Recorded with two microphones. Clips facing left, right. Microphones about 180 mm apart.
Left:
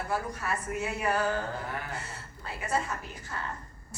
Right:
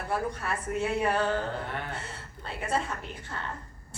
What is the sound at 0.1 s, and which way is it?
A woman's voice, 30° right (ahead or behind).